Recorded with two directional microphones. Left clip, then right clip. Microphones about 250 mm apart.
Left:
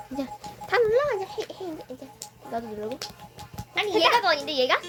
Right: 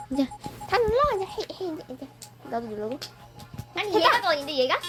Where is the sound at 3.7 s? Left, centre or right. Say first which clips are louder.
Even; centre.